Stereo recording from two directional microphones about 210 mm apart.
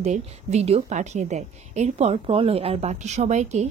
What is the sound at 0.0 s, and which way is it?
A woman's voice, 30° right (ahead or behind).